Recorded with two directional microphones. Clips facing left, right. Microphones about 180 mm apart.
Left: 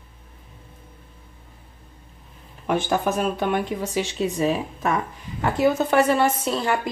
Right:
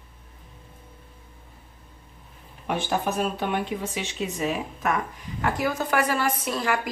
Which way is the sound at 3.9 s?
35° left (ahead or behind).